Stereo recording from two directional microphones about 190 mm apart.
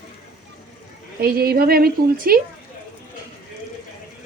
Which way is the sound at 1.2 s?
55° right (ahead or behind).